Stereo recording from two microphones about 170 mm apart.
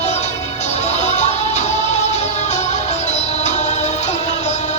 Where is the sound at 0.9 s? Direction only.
40° left (ahead or behind).